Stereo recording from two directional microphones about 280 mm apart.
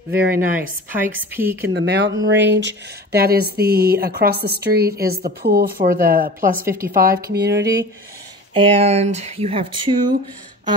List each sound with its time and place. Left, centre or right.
0.1 s speech: right
0.6 s a woman's voice: centre
1.7 s speech: right
8.5 s speech: right